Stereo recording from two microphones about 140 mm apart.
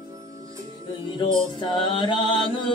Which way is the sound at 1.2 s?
35° left (ahead or behind).